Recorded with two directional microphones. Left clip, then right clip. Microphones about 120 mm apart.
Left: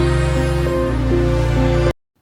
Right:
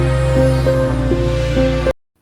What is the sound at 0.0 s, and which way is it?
Music, centre (ahead or behind).